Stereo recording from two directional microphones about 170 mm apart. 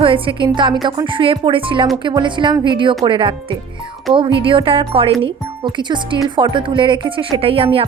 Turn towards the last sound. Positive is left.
turn(degrees=-35)  # may be behind; listen again after turning